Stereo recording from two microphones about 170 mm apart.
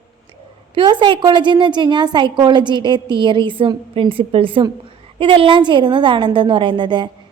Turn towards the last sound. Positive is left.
turn(degrees=-25)  # may be behind; listen again after turning